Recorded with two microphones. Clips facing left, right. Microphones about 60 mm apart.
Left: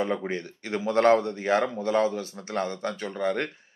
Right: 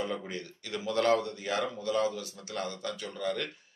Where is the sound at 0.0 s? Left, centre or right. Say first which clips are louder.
Left 7 dB; left.